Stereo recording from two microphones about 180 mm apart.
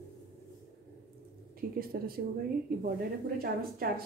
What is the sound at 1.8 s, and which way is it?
Speech, 55° right (ahead or behind).